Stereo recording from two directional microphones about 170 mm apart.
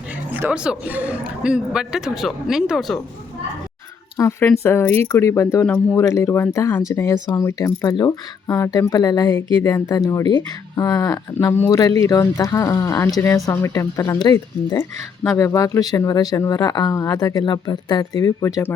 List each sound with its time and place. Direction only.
0.3 s a man's voice: 10° right (ahead or behind)
4.2 s speech: 15° left (ahead or behind)
5.6 s speech: 5° left (ahead or behind)
6.0 s speech: 15° left (ahead or behind)